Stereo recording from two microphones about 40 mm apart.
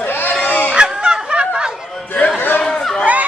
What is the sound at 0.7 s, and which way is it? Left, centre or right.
Fowl, right.